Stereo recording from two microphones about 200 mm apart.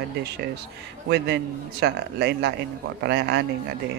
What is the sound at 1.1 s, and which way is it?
A man's voice, 55° right (ahead or behind).